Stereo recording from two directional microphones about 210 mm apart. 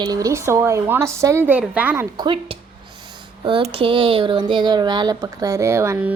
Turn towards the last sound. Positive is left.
turn(degrees=-10)  # may be behind; listen again after turning